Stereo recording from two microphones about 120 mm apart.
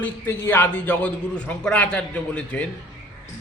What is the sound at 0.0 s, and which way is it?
A man's voice, 20° left (ahead or behind).